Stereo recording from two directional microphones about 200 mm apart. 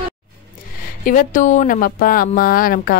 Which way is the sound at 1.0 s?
40° left (ahead or behind).